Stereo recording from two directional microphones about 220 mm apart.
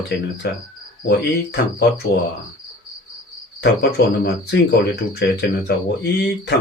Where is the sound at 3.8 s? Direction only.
50° left (ahead or behind).